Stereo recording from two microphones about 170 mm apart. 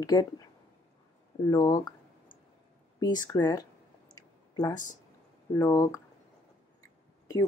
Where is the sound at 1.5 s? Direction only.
20° left (ahead or behind).